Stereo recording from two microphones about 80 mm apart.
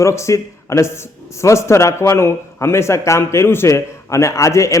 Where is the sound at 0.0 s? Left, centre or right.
Left.